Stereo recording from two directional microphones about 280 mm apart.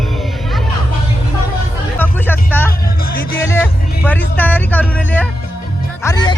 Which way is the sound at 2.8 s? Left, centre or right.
Left.